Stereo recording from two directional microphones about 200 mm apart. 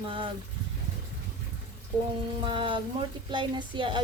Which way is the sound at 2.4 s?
25° right (ahead or behind).